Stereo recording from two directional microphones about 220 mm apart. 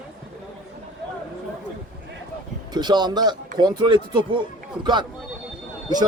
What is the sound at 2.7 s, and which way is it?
Speech, 20° right (ahead or behind).